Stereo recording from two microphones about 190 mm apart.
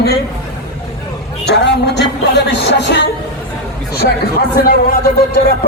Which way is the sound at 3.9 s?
55° left (ahead or behind).